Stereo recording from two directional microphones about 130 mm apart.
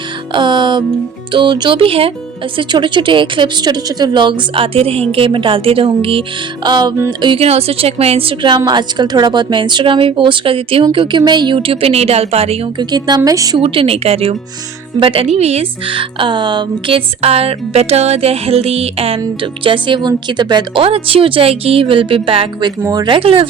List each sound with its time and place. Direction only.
0.3 s a woman's voice: 35° right (ahead or behind)
6.7 s a woman's voice: 35° right (ahead or behind); by 12.5 s 50° right (ahead or behind)
12.9 s a woman's voice: 30° right (ahead or behind)
13.6 s a woman's voice: 50° right (ahead or behind)
20.8 s speech: 45° right (ahead or behind)
22.8 s speech: 30° right (ahead or behind)
23.1 s speech: 45° right (ahead or behind)